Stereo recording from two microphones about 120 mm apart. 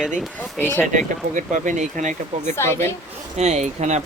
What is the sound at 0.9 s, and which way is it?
Speech, 90° right.